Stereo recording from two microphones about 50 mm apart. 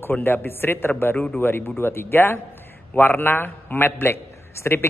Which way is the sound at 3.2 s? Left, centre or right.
Left.